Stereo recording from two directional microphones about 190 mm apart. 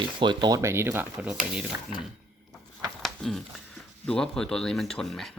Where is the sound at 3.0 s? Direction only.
Centre (ahead or behind).